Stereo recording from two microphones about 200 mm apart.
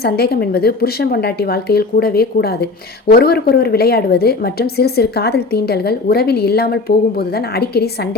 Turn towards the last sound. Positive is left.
turn(degrees=50)  # may be behind; listen again after turning